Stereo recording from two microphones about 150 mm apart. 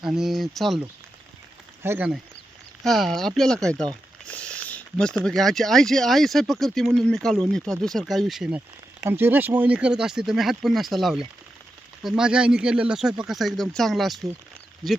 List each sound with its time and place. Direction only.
0.0 s speech: 5° right (ahead or behind)
1.8 s speech: 15° right (ahead or behind)
2.8 s speech: centre (ahead or behind)